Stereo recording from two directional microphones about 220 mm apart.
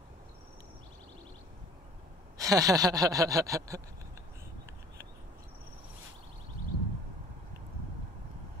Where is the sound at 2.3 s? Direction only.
15° right (ahead or behind).